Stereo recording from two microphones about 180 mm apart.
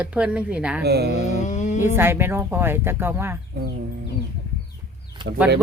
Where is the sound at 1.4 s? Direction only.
45° left (ahead or behind).